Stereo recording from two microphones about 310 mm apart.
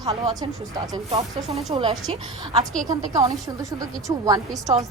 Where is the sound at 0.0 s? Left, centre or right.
Centre.